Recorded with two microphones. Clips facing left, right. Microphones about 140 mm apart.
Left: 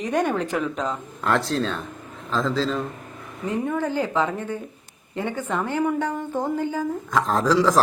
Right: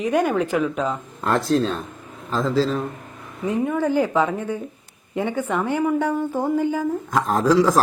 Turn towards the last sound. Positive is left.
turn(degrees=-10)  # may be behind; listen again after turning